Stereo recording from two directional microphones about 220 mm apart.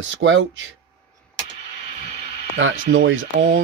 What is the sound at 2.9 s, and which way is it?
Speech, 55° right (ahead or behind).